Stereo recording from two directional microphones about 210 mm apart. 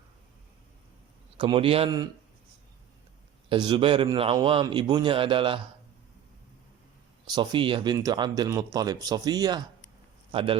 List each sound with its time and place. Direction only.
1.4 s a man's voice: 25° right (ahead or behind)
3.5 s a man's voice: 20° right (ahead or behind)
7.3 s a man's voice: 20° right (ahead or behind)